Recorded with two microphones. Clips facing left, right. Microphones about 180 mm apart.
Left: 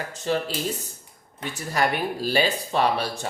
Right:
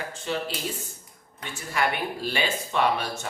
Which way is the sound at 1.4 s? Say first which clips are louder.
Left 3 dB; 40° left (ahead or behind).